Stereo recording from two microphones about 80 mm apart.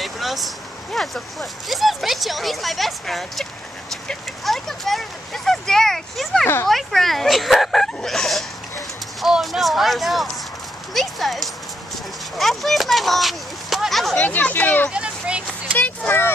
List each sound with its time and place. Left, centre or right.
0.0 s vehicle: centre
0.9 s speech: centre
6.4 s speech: left
6.7 s speech: centre
10.9 s clip-clop: centre
12.4 s a child's voice: centre
14.1 s speech: centre
14.9 s speech: centre